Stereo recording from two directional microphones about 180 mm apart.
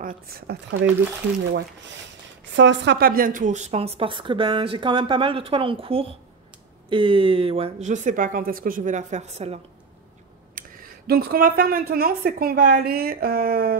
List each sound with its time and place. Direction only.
0.0 s a woman's voice: 55° right (ahead or behind)
2.5 s speech: 90° right; by 9.6 s 35° right (ahead or behind)
10.6 s a sound: 50° right (ahead or behind)
11.1 s a woman's voice: 55° right (ahead or behind)